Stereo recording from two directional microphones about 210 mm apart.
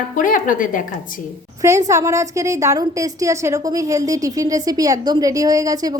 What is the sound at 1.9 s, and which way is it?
A woman's voice, 15° right (ahead or behind).